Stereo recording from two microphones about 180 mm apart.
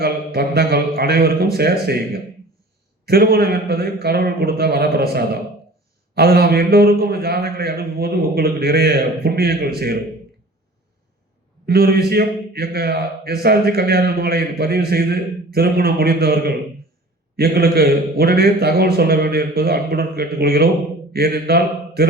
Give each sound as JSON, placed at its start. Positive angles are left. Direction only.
{"t": 0.3, "sound": "a sound", "side_deg": -60}
{"t": 1.5, "sound": "a man's voice", "side_deg": -60}
{"t": 3.1, "sound": "a man's voice", "side_deg": -60}
{"t": 11.6, "sound": "a man's voice", "side_deg": -60}